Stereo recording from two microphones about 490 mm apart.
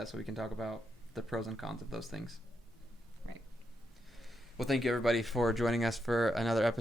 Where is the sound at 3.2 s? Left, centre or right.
Right.